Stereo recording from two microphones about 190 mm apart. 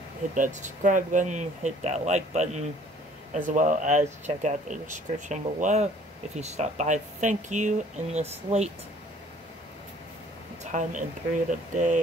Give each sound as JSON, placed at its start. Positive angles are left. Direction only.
{"t": 0.3, "sound": "speech", "side_deg": -40}
{"t": 10.6, "sound": "a woman's voice", "side_deg": -40}